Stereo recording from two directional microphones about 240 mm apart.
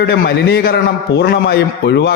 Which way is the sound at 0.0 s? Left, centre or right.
Left.